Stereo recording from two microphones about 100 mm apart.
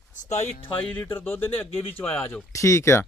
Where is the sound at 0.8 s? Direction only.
15° left (ahead or behind).